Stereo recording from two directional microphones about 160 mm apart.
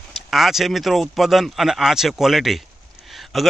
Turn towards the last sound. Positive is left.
turn(degrees=0)  # may be behind; listen again after turning